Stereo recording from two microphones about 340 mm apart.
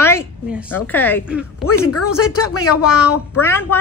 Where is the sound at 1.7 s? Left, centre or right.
Left.